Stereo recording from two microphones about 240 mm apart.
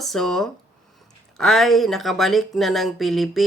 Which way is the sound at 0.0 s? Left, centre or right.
Centre.